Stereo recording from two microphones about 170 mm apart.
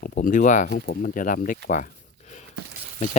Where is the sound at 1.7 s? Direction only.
45° left (ahead or behind).